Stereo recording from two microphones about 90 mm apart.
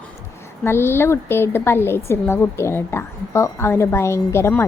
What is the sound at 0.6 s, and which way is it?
A woman's voice, 25° left (ahead or behind).